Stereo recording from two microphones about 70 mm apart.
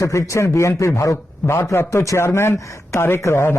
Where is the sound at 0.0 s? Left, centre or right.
Left.